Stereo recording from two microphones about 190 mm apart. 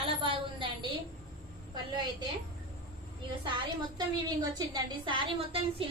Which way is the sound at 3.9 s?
20° right (ahead or behind).